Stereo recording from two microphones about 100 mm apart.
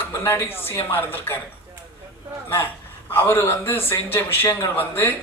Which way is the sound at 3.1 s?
20° left (ahead or behind).